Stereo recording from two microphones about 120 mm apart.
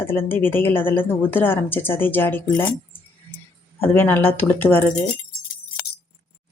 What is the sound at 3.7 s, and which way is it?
Speech, 20° left (ahead or behind).